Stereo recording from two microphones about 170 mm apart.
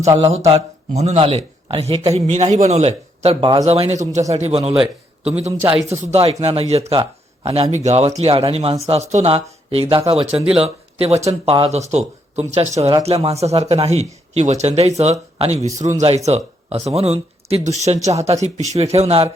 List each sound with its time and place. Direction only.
0.2 s a man's voice: 40° right (ahead or behind)